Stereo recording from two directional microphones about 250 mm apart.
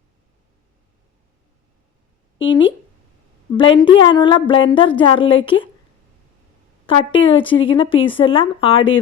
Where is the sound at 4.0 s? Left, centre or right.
Centre.